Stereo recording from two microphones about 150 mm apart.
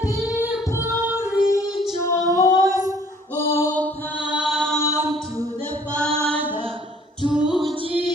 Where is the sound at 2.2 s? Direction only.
25° right (ahead or behind).